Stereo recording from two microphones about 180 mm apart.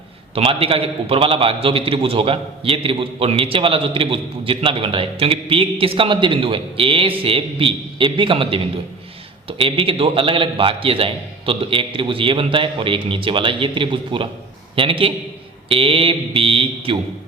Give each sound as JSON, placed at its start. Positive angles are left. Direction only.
{"t": 0.3, "sound": "a man's voice", "side_deg": -30}